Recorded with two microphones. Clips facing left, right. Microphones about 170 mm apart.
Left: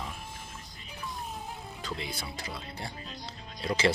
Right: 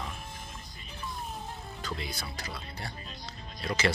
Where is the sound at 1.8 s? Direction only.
25° left (ahead or behind).